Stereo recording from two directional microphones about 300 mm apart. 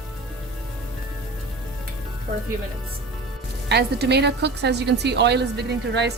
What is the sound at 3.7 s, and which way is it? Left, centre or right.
A woman's voice, right.